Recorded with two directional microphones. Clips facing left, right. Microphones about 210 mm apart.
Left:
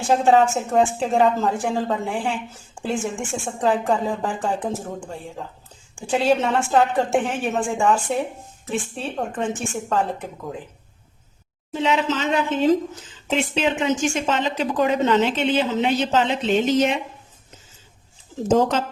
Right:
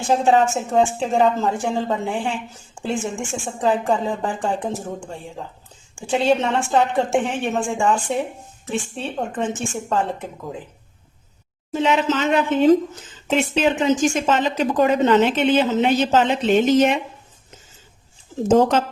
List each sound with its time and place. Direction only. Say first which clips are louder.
0.1 s a woman's voice: even; centre (ahead or behind)
11.7 s a woman's voice: right 2 dB; 50° right (ahead or behind)
13.2 s a woman's voice: right 3 dB; 40° right (ahead or behind)